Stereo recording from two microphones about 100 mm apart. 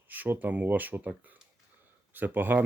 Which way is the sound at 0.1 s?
15° right (ahead or behind).